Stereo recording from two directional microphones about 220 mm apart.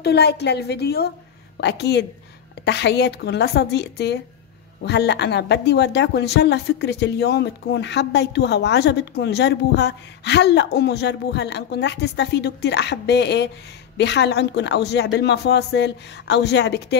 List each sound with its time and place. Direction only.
0.0 s speech: 50° left (ahead or behind)